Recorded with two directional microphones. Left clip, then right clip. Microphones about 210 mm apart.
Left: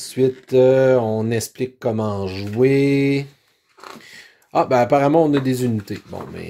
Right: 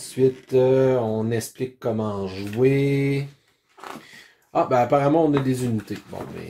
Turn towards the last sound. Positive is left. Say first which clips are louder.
# left 3 dB
turn(degrees=45)  # may be behind; listen again after turning